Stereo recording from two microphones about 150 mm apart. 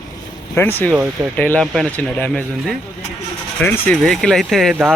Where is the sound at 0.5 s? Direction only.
15° left (ahead or behind).